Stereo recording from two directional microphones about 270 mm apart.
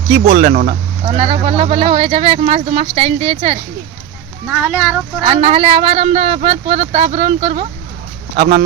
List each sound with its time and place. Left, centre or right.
0.3 s speech: right
4.4 s speech: centre
5.2 s speech: right